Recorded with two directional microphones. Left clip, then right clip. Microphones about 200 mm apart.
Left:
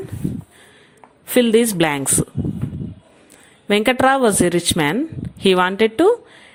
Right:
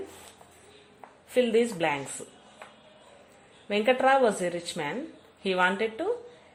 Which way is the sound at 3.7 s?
40° left (ahead or behind).